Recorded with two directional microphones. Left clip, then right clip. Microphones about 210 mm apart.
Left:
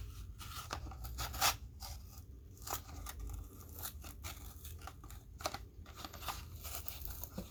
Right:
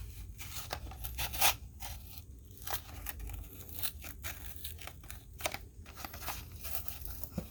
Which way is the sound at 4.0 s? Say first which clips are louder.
Right 5 dB; 15° right (ahead or behind).